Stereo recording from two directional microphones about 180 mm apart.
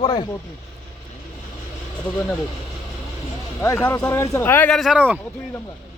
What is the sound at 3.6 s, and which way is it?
Speech, 15° left (ahead or behind).